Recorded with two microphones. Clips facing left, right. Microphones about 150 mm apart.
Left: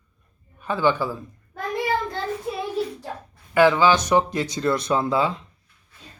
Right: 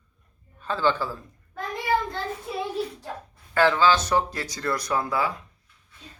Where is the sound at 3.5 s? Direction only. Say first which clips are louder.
Left 3 dB; 15° left (ahead or behind).